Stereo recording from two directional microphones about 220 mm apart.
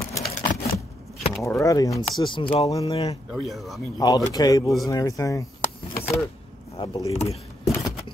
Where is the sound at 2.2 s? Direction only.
25° left (ahead or behind).